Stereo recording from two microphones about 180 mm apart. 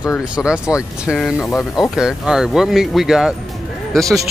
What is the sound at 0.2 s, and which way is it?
Speech, 5° right (ahead or behind).